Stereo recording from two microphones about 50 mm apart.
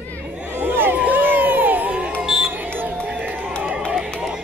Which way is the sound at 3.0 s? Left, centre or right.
Right.